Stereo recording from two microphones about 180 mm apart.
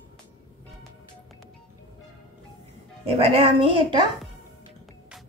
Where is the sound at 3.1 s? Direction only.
30° right (ahead or behind).